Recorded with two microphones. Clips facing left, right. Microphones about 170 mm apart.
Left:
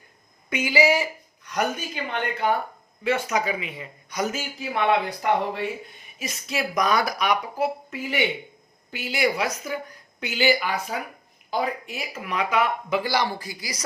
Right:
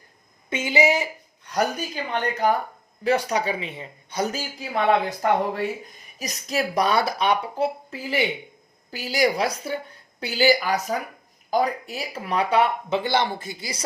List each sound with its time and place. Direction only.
0.5 s speech: 25° right (ahead or behind)
1.5 s speech: 35° right (ahead or behind)